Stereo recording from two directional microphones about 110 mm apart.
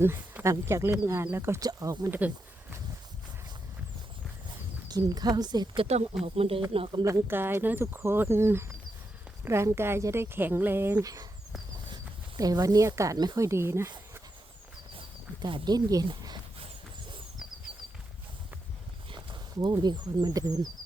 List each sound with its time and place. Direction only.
0.0 s speech: 20° right (ahead or behind)
1.6 s speech: 35° right (ahead or behind)
2.0 s a sound: 15° right (ahead or behind)
4.9 s speech: 35° right (ahead or behind)
5.8 s speech: 70° right (ahead or behind)
7.0 s speech: 25° right (ahead or behind)
11.0 s speech: 35° right (ahead or behind)
12.4 s speech: 35° right (ahead or behind)
14.9 s a sound: 50° right (ahead or behind)
19.1 s speech: 45° right (ahead or behind)